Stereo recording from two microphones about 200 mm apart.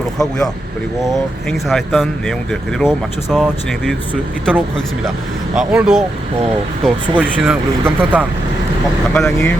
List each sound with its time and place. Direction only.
0.2 s speech: centre (ahead or behind)
5.5 s speech: 5° right (ahead or behind)
7.2 s speech: 5° right (ahead or behind)
9.1 s speech: 5° left (ahead or behind)